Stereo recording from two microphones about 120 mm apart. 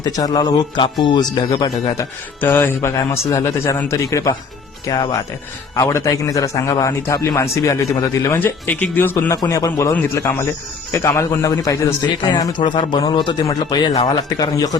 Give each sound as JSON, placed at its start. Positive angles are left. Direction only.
{"t": 0.0, "sound": "a man's voice", "side_deg": 35}
{"t": 2.4, "sound": "a man's voice", "side_deg": 20}
{"t": 9.4, "sound": "a man's voice", "side_deg": 30}
{"t": 12.0, "sound": "a man's voice", "side_deg": 40}